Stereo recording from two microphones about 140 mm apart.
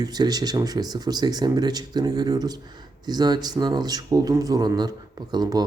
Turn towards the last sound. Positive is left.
turn(degrees=-30)  # may be behind; listen again after turning